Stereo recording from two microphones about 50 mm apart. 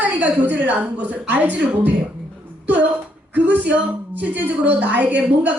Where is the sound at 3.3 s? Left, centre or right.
Right.